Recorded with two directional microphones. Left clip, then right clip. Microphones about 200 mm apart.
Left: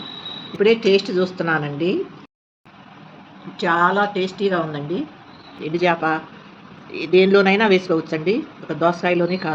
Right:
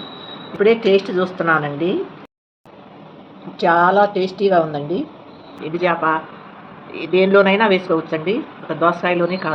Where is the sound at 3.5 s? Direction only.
10° left (ahead or behind).